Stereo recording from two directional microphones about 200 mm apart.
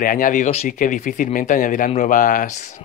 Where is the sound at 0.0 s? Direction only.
45° left (ahead or behind).